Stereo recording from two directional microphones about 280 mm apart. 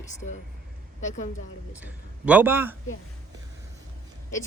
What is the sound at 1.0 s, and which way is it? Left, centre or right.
Speech, left.